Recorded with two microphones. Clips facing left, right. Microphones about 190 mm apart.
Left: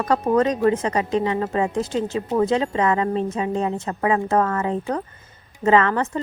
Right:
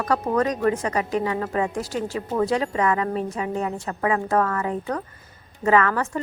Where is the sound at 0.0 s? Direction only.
25° left (ahead or behind).